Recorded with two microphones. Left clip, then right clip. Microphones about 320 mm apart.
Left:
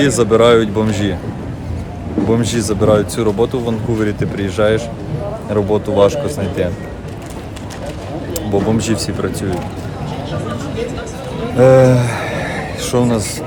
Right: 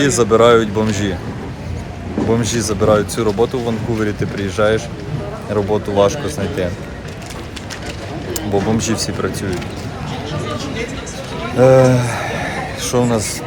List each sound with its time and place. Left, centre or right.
0.0 s speech: centre
2.3 s speech: centre
8.8 s speech: centre
11.5 s a sound: centre